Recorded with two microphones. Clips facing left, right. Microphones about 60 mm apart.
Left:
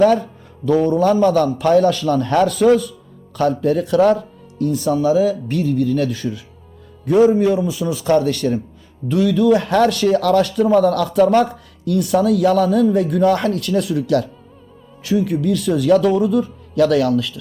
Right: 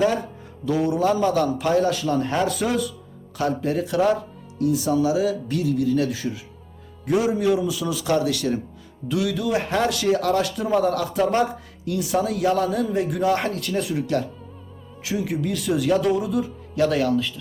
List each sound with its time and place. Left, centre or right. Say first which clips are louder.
0.0 s a man's voice: left 8 dB; left
7.1 s speech: left 7 dB; left
15.0 s speech: left 7 dB; left